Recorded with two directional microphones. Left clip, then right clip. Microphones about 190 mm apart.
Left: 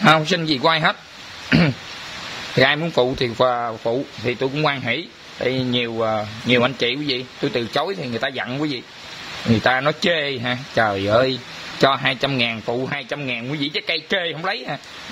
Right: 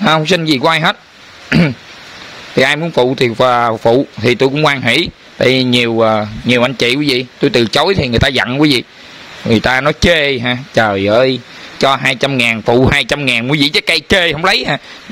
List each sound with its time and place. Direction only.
0.0 s a man's voice: 40° right (ahead or behind)
2.8 s a man's voice: 30° right (ahead or behind); by 14.8 s 50° right (ahead or behind)